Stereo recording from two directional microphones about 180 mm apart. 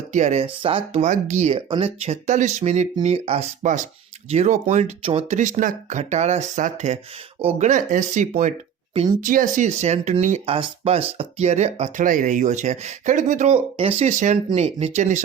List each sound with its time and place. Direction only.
0.1 s speech: 40° right (ahead or behind)